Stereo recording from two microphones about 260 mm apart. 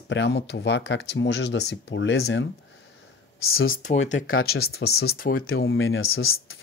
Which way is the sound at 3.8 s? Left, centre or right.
Left.